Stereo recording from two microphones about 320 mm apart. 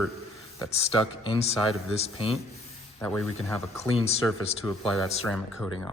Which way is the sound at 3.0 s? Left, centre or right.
Centre.